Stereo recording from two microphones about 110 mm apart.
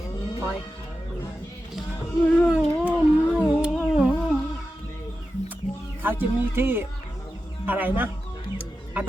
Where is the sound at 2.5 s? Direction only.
10° right (ahead or behind).